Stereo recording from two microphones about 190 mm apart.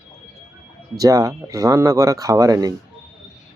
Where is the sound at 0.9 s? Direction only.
15° right (ahead or behind).